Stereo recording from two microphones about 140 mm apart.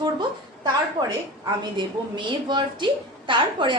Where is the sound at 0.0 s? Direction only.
30° right (ahead or behind).